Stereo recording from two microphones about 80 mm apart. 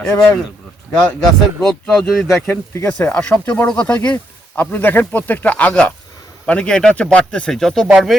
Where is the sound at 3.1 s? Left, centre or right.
Centre.